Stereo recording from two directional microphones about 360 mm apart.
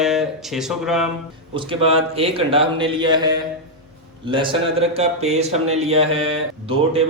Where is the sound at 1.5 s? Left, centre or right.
Centre.